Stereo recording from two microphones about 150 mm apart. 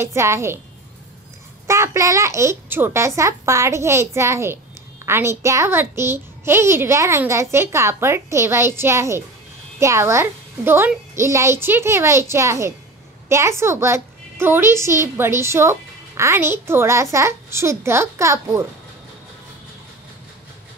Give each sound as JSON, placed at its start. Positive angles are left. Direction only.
{"t": 0.0, "sound": "a woman's voice", "side_deg": -20}
{"t": 1.7, "sound": "a child's voice", "side_deg": -20}